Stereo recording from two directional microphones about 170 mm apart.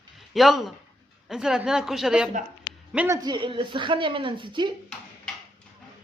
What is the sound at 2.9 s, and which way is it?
A woman's voice, 15° right (ahead or behind).